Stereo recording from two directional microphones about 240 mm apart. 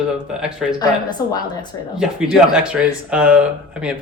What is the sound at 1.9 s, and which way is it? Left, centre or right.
Speech, centre.